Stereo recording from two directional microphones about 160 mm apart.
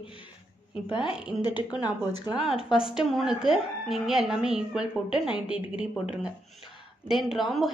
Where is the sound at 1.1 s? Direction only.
5° right (ahead or behind).